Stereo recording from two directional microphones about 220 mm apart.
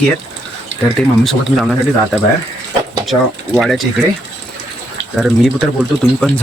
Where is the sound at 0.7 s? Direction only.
55° right (ahead or behind).